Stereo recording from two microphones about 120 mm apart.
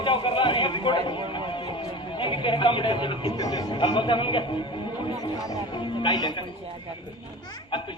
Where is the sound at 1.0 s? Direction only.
40° left (ahead or behind).